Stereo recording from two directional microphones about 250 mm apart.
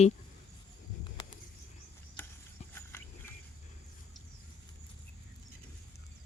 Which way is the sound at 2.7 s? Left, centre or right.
Centre.